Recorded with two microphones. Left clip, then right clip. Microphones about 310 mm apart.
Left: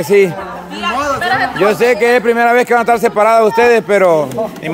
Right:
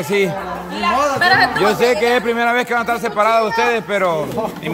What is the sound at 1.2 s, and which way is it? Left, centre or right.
Speech, right.